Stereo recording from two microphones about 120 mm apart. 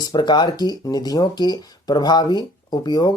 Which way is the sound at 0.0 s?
35° left (ahead or behind).